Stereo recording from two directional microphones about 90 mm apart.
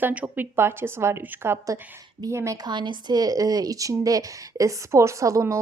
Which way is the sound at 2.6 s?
60° right (ahead or behind).